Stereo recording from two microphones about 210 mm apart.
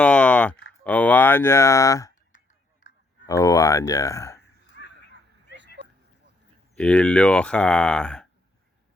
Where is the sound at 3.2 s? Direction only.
15° left (ahead or behind).